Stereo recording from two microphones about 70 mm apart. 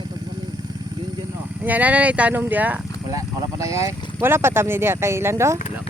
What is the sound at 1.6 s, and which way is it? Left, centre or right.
Speech, right.